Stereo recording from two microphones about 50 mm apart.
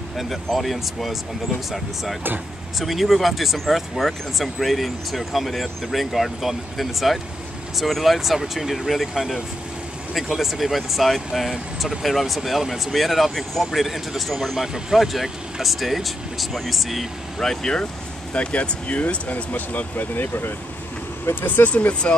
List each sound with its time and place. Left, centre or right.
0.2 s speech: centre
2.8 s speech: centre
17.4 s speech: centre
18.3 s speech: left
21.5 s speech: left